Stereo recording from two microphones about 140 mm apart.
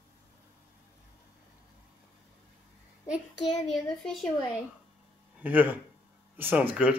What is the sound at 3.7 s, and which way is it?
Speech, 5° left (ahead or behind).